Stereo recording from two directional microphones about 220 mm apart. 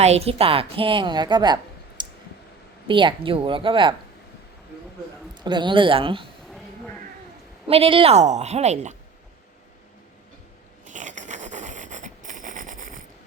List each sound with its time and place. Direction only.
0.0 s a woman's voice: 30° right (ahead or behind)
2.0 s clicking: 20° right (ahead or behind)
2.8 s a woman's voice: 20° right (ahead or behind)
5.3 s a woman's voice: 20° right (ahead or behind)
7.7 s a woman's voice: 25° right (ahead or behind)
10.8 s a sound: 35° right (ahead or behind)